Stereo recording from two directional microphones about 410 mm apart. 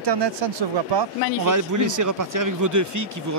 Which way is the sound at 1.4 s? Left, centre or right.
Right.